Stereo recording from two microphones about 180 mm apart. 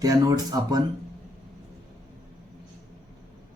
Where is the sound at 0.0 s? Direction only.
20° right (ahead or behind).